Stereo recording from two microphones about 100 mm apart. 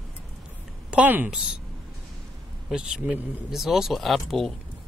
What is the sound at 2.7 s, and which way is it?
Speech, 5° right (ahead or behind).